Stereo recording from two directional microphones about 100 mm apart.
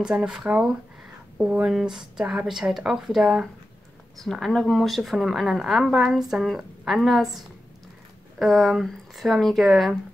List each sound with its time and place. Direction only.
0.0 s a woman's voice: 10° right (ahead or behind)